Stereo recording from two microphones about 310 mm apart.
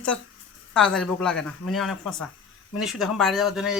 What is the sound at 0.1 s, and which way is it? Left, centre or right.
Speech, centre.